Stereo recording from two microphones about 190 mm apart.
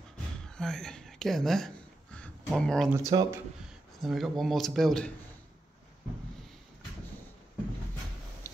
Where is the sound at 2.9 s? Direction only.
20° right (ahead or behind).